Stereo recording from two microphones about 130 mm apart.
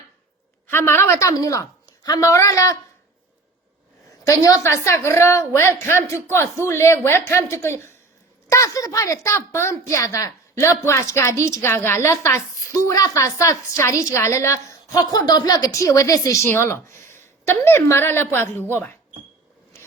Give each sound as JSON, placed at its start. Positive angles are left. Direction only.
{"t": 0.7, "sound": "a woman's voice", "side_deg": 15}
{"t": 4.2, "sound": "a woman's voice", "side_deg": 25}